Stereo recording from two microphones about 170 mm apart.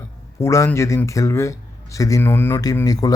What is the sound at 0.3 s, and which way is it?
Speech, 15° left (ahead or behind).